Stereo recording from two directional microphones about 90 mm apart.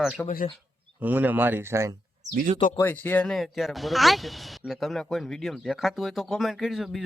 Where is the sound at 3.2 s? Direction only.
Centre (ahead or behind).